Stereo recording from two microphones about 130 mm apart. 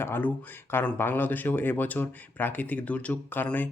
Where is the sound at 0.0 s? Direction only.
15° left (ahead or behind).